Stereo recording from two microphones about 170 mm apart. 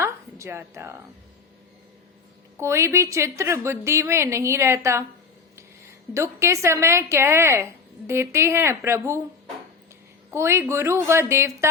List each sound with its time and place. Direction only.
0.0 s a sound: 15° right (ahead or behind)
2.6 s a woman's voice: 15° right (ahead or behind)
6.1 s a woman's voice: 15° right (ahead or behind)
10.3 s a woman's voice: 15° right (ahead or behind)